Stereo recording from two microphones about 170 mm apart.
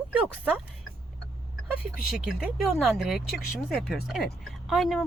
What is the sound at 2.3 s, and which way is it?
Speech, 5° right (ahead or behind).